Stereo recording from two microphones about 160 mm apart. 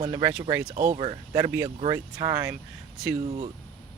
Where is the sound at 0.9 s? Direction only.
35° right (ahead or behind).